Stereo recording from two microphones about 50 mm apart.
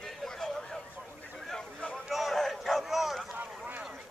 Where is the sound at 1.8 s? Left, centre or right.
Left.